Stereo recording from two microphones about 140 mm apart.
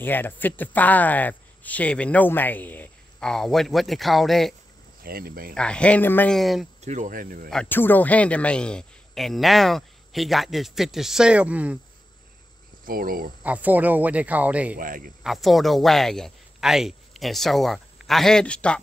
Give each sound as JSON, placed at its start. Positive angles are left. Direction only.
{"t": 0.0, "sound": "speech", "side_deg": 15}
{"t": 5.0, "sound": "speech", "side_deg": -90}
{"t": 5.5, "sound": "speech", "side_deg": 5}
{"t": 6.3, "sound": "speech", "side_deg": 0}
{"t": 6.8, "sound": "speech", "side_deg": -60}
{"t": 7.6, "sound": "speech", "side_deg": 15}
{"t": 12.8, "sound": "speech", "side_deg": -90}
{"t": 13.4, "sound": "speech", "side_deg": -10}
{"t": 14.8, "sound": "speech", "side_deg": -80}
{"t": 15.2, "sound": "speech", "side_deg": 0}